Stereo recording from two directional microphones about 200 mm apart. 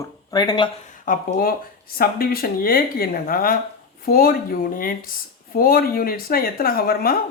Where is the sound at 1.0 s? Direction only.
45° left (ahead or behind).